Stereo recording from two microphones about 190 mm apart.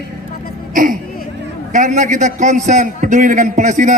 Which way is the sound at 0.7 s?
45° right (ahead or behind).